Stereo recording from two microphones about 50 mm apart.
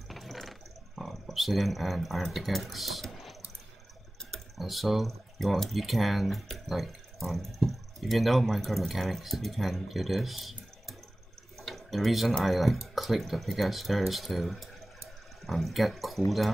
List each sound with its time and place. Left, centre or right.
0.1 s a sound: centre
4.6 s speech: centre
11.5 s drip: centre
12.4 s speech: centre